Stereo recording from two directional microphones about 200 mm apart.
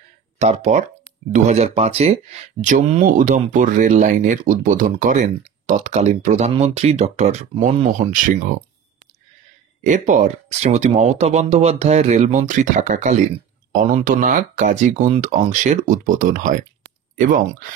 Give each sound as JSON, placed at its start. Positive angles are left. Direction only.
{"t": 0.4, "sound": "speech", "side_deg": -35}
{"t": 9.8, "sound": "speech", "side_deg": -40}